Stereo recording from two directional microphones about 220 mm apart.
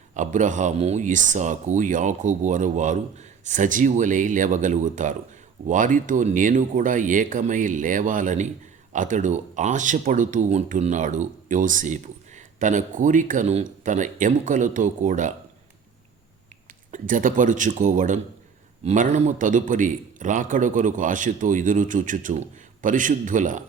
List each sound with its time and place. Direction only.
0.1 s a man's voice: 35° right (ahead or behind)
16.9 s a man's voice: 35° right (ahead or behind)